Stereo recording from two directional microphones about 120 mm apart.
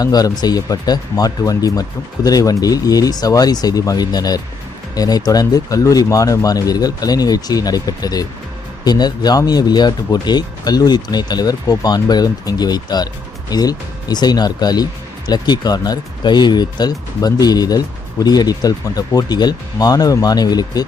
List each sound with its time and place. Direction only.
0.0 s speech: 35° left (ahead or behind)